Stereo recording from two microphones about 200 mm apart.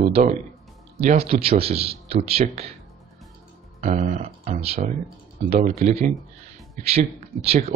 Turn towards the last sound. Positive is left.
turn(degrees=-30)  # may be behind; listen again after turning